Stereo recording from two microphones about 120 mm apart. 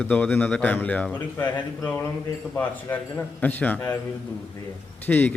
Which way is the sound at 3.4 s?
15° left (ahead or behind).